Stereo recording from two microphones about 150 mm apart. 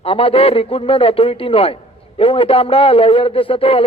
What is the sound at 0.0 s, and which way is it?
A man's voice, 40° left (ahead or behind).